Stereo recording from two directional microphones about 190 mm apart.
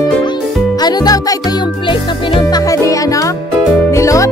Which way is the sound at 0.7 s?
20° left (ahead or behind).